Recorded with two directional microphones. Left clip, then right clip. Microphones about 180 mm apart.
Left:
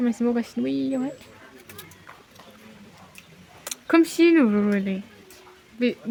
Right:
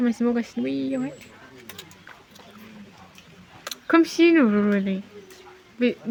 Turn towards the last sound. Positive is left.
turn(degrees=0)  # may be behind; listen again after turning